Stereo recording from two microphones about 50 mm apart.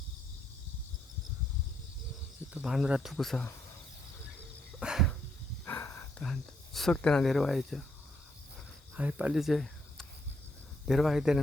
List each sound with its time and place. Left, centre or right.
2.6 s speech: centre
3.0 s speech: centre
4.8 s a sound: right
5.6 s a sound: left
6.2 s speech: centre
9.0 s speech: right
9.3 s speech: centre
10.8 s speech: centre